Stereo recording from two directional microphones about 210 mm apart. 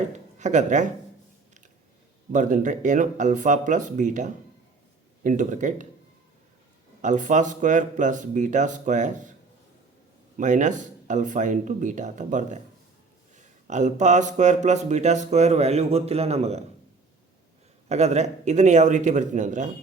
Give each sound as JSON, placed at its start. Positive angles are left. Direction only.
{"t": 0.3, "sound": "speech", "side_deg": -35}
{"t": 2.3, "sound": "speech", "side_deg": -35}
{"t": 7.0, "sound": "speech", "side_deg": -35}
{"t": 10.3, "sound": "speech", "side_deg": -35}
{"t": 17.8, "sound": "speech", "side_deg": -30}